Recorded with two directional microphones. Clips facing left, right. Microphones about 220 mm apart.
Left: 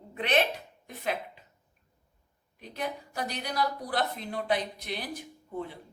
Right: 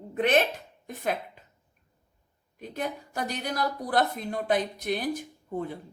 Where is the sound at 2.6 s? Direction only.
45° right (ahead or behind).